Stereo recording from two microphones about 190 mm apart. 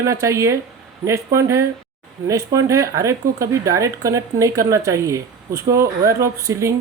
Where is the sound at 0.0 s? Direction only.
15° right (ahead or behind).